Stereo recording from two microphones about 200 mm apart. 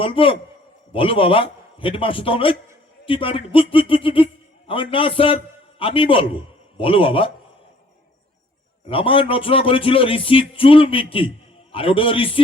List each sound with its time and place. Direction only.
0.0 s speech: 25° left (ahead or behind)
8.9 s speech: 25° left (ahead or behind)